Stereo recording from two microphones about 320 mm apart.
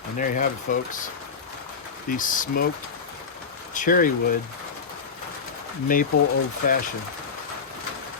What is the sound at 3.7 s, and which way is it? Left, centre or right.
Speech, left.